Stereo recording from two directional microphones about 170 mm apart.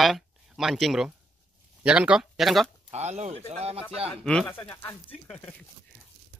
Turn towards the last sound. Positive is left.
turn(degrees=5)  # may be behind; listen again after turning